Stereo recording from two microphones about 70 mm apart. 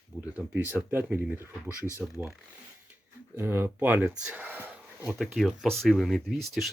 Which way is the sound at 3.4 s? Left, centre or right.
Right.